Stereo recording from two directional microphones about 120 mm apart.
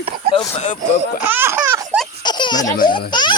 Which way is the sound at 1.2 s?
15° right (ahead or behind).